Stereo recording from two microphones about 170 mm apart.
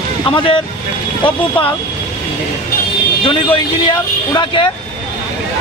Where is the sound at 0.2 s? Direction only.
30° left (ahead or behind).